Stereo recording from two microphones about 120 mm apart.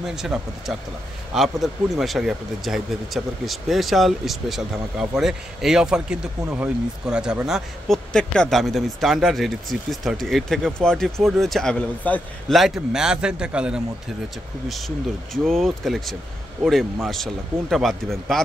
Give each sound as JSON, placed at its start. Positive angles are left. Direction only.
{"t": 0.0, "sound": "speech", "side_deg": -5}
{"t": 12.1, "sound": "a man's voice", "side_deg": 15}
{"t": 12.4, "sound": "a man's voice", "side_deg": 0}
{"t": 15.4, "sound": "speech", "side_deg": 0}